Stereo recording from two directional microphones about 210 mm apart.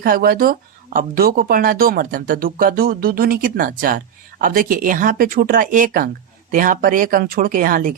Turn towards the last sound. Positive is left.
turn(degrees=-40)  # may be behind; listen again after turning